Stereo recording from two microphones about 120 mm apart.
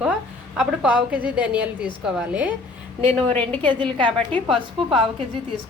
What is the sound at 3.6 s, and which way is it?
A woman's voice, 45° right (ahead or behind).